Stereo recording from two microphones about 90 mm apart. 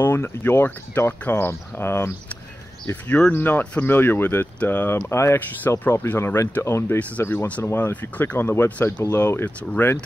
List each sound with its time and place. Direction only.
0.0 s speech: 25° left (ahead or behind)
5.1 s speech: 30° left (ahead or behind)
5.9 s speech: 20° left (ahead or behind)
7.0 s speech: 15° left (ahead or behind)